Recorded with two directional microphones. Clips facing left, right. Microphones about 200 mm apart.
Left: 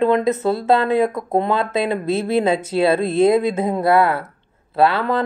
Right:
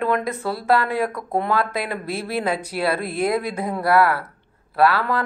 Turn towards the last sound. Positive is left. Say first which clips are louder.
# left 2 dB
turn(degrees=25)  # may be behind; listen again after turning